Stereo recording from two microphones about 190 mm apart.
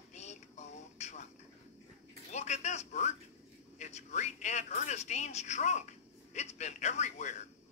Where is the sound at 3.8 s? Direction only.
35° left (ahead or behind).